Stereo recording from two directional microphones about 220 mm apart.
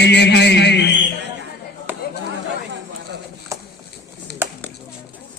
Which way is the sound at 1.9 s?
10° right (ahead or behind).